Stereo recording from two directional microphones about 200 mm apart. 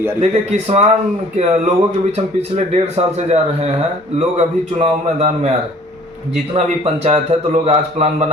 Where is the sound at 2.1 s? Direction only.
30° right (ahead or behind).